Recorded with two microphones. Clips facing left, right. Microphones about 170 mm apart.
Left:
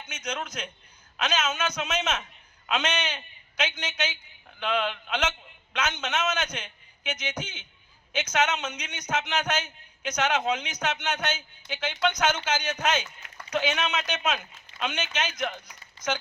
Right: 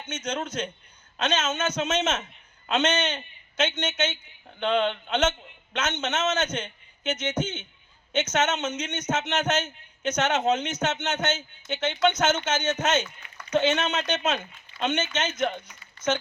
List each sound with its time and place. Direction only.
0.0 s a man's voice: 30° right (ahead or behind)